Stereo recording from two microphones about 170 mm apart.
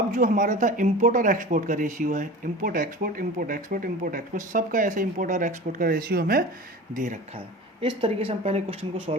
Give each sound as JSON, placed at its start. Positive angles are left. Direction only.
{"t": 0.1, "sound": "speech", "side_deg": -50}
{"t": 6.9, "sound": "speech", "side_deg": -50}
{"t": 7.3, "sound": "a woman's voice", "side_deg": -30}